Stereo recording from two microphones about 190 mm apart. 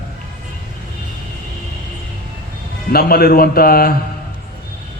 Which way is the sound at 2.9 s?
55° left (ahead or behind).